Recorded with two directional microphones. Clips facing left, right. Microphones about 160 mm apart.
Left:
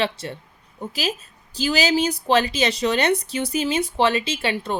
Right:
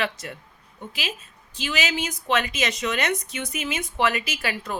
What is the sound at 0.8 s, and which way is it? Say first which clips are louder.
Speech: left 7 dB; 40° left (ahead or behind).